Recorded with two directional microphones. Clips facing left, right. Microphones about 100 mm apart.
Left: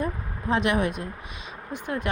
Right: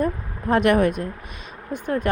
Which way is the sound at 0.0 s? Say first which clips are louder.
Right 5 dB; 50° right (ahead or behind).